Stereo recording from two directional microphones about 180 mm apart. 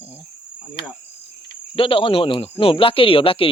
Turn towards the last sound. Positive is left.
turn(degrees=30)  # may be behind; listen again after turning